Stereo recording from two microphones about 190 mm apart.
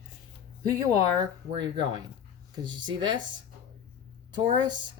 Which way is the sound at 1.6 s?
25° right (ahead or behind).